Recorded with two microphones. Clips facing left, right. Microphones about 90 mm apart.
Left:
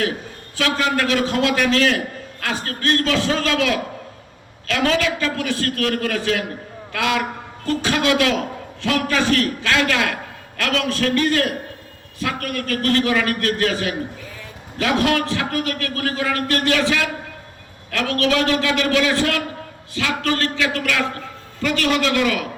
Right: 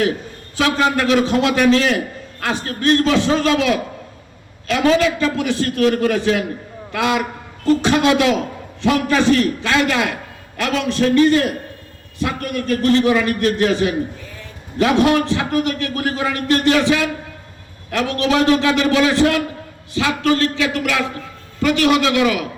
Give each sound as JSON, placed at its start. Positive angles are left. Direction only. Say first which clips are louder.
{"t": 0.5, "sound": "a man's voice", "louder": "right 3 dB", "side_deg": -25}